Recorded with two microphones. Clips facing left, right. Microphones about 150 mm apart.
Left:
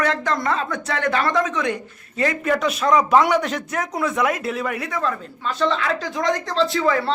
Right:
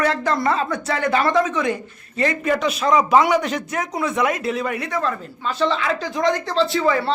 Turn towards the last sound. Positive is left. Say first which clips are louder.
# right 1 dB
turn(degrees=0)  # may be behind; listen again after turning